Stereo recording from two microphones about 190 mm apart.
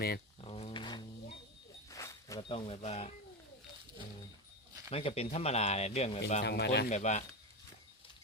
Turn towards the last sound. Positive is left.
turn(degrees=40)  # may be behind; listen again after turning